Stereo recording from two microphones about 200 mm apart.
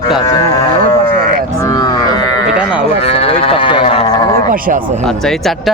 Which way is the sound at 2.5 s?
5° right (ahead or behind).